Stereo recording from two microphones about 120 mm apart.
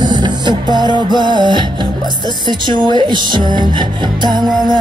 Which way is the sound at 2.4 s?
40° right (ahead or behind).